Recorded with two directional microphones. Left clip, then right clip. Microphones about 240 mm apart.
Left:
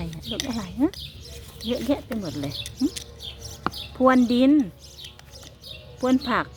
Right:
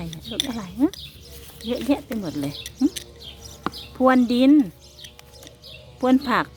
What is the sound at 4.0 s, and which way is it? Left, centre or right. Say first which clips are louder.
Speech: right 1 dB; centre.